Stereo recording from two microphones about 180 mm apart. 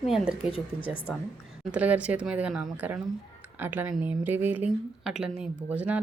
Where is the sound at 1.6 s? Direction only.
5° right (ahead or behind).